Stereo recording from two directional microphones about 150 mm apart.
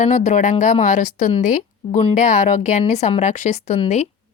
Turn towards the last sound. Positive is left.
turn(degrees=45)  # may be behind; listen again after turning